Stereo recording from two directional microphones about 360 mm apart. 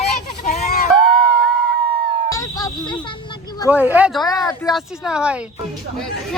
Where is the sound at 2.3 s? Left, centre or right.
Centre.